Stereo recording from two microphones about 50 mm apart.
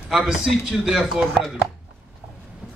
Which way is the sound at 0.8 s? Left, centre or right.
Centre.